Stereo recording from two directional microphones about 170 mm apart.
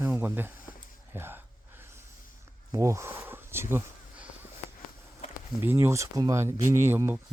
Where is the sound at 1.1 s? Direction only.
15° right (ahead or behind).